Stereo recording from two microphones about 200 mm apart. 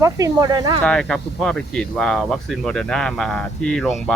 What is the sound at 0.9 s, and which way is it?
Speech, 5° left (ahead or behind).